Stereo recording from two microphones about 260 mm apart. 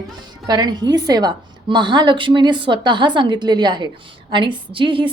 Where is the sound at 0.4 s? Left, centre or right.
Centre.